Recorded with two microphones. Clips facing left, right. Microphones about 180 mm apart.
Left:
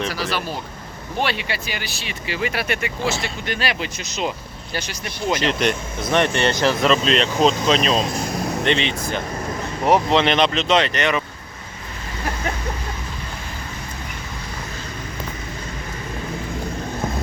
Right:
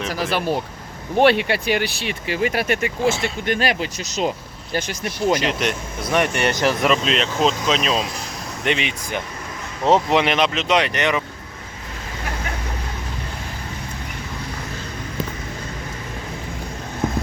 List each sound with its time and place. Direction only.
0.1 s speech: 50° right (ahead or behind)
5.4 s speech: 5° right (ahead or behind)
8.0 s speech: 45° left (ahead or behind)
8.6 s speech: 10° right (ahead or behind)
10.2 s speech: 5° right (ahead or behind)